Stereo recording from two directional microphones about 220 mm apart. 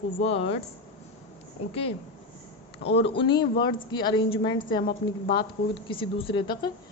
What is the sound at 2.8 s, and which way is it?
Speech, 50° left (ahead or behind).